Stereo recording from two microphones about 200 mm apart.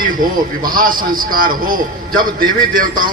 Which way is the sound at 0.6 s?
45° right (ahead or behind).